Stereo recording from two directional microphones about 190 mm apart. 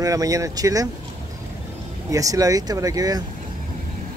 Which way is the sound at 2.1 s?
20° right (ahead or behind).